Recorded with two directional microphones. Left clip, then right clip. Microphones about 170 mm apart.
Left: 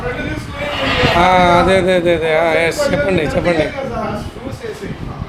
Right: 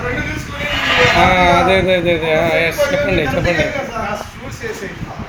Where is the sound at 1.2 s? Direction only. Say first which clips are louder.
Left 1 dB; 25° left (ahead or behind).